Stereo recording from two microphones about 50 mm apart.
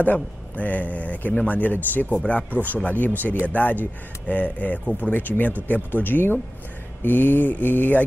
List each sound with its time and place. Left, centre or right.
0.0 s speech: left